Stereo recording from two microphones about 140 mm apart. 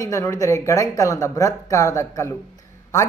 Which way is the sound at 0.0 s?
25° left (ahead or behind).